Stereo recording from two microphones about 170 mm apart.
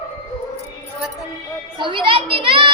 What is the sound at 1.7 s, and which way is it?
Speech, 30° right (ahead or behind).